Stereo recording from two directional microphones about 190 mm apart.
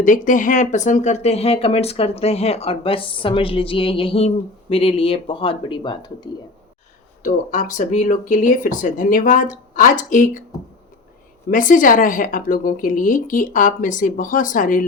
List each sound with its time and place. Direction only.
0.0 s speech: 45° left (ahead or behind); by 6.2 s 25° left (ahead or behind)
7.2 s a woman's voice: 40° left (ahead or behind)
11.5 s a woman's voice: 45° left (ahead or behind)